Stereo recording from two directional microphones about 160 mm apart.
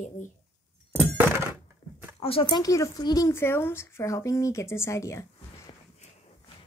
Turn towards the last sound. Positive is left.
turn(degrees=20)  # may be behind; listen again after turning